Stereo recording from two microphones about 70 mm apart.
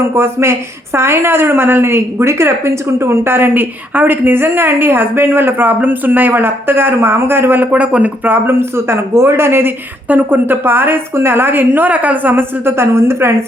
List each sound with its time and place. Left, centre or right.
0.0 s a woman's voice: right